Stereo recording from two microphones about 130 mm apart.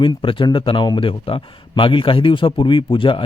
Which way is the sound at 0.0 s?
40° left (ahead or behind).